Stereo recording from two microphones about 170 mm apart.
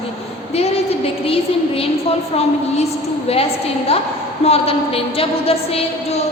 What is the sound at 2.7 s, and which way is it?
A woman's voice, 40° left (ahead or behind).